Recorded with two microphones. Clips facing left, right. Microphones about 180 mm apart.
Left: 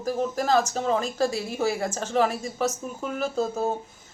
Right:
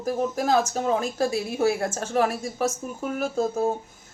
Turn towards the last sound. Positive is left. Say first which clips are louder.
# right 1 dB
turn(degrees=-10)  # may be behind; listen again after turning